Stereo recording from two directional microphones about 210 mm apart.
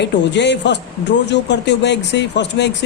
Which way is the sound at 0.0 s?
55° left (ahead or behind).